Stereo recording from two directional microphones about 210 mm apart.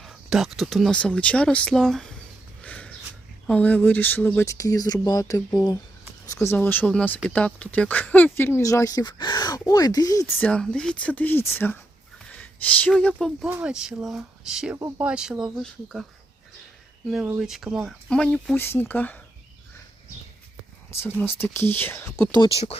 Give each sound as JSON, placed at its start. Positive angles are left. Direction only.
{"t": 0.0, "sound": "speech", "side_deg": 0}
{"t": 2.6, "sound": "a sound", "side_deg": 5}
{"t": 3.4, "sound": "speech", "side_deg": 5}
{"t": 10.4, "sound": "speech", "side_deg": 5}
{"t": 17.2, "sound": "speech", "side_deg": -5}
{"t": 20.9, "sound": "speech", "side_deg": 10}
{"t": 22.4, "sound": "speech", "side_deg": 30}